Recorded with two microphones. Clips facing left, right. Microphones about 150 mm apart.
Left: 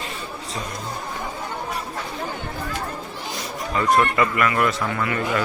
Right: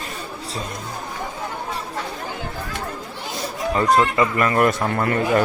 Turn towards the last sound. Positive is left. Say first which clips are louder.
# right 4 dB
turn(degrees=-45)  # may be behind; listen again after turning